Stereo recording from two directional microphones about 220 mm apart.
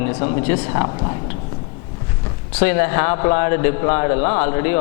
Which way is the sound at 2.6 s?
15° left (ahead or behind).